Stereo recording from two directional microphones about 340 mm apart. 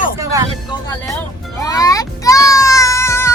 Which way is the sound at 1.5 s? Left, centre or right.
Centre.